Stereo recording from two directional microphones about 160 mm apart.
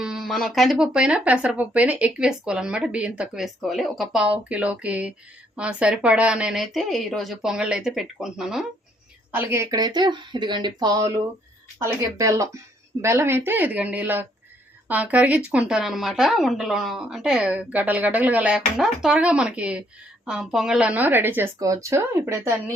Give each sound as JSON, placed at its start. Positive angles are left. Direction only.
{"t": 0.0, "sound": "speech", "side_deg": 0}
{"t": 9.3, "sound": "speech", "side_deg": -15}
{"t": 9.6, "sound": "speech", "side_deg": -25}